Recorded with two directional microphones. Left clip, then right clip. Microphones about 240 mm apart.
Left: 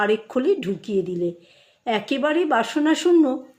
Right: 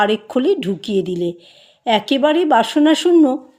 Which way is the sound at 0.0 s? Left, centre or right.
Right.